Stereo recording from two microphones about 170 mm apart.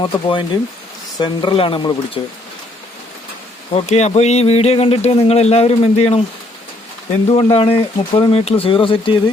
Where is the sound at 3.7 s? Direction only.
40° left (ahead or behind).